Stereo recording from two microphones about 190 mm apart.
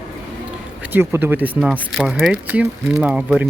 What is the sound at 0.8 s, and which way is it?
Speech, 10° right (ahead or behind).